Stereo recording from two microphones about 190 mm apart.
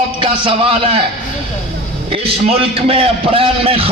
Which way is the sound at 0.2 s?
30° right (ahead or behind).